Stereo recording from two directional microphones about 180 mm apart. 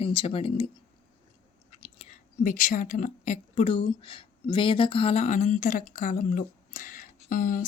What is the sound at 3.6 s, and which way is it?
A woman's voice, 30° left (ahead or behind).